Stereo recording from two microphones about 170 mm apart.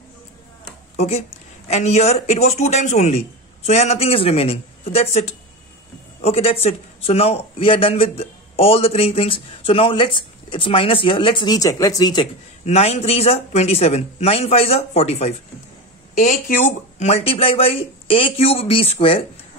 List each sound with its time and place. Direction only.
0.9 s a man's voice: 40° left (ahead or behind)
12.6 s a man's voice: 40° left (ahead or behind)
16.2 s a man's voice: 50° left (ahead or behind); by 19.2 s 35° left (ahead or behind)